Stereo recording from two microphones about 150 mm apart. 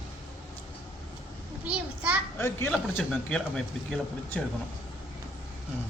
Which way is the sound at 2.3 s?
20° left (ahead or behind).